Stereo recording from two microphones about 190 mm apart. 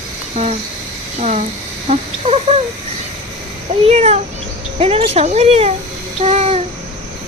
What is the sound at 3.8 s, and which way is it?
Speech, 35° right (ahead or behind).